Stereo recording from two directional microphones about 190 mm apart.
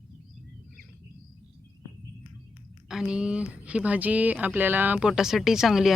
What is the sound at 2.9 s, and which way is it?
Speech, 5° right (ahead or behind).